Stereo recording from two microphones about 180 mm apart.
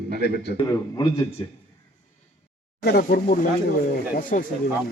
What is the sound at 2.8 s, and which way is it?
A man's voice, 60° left (ahead or behind).